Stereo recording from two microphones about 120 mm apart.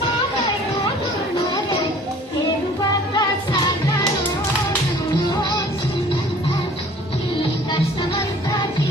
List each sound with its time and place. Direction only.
3.2 s music: 35° left (ahead or behind)